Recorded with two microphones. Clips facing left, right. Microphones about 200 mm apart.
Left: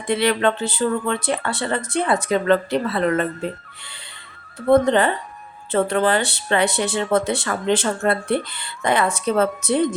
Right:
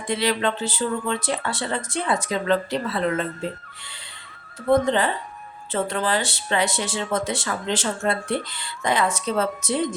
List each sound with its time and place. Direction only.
0.1 s speech: 60° left (ahead or behind)
4.7 s speech: 60° left (ahead or behind)